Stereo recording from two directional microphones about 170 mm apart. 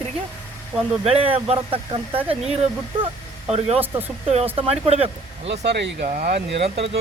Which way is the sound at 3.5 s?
35° right (ahead or behind).